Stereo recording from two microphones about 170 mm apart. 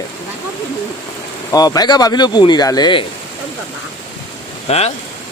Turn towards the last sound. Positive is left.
turn(degrees=40)  # may be behind; listen again after turning